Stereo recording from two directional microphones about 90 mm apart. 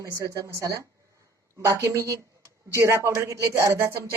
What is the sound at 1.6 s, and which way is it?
Speech, 25° right (ahead or behind).